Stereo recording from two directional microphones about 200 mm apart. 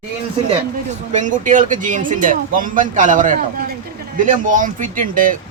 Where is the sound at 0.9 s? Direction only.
40° right (ahead or behind).